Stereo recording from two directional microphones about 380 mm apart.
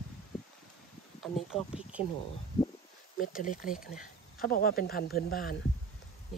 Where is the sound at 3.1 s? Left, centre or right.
Left.